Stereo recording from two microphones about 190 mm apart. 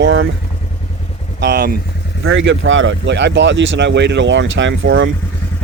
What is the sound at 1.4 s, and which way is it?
Speech, 60° right (ahead or behind).